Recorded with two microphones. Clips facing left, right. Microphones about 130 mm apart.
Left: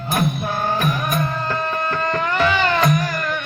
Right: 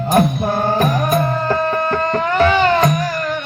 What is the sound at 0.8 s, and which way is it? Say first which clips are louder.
Music: right 6 dB; 35° right (ahead or behind).